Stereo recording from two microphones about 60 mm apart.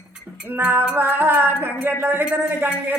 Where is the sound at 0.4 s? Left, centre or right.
Right.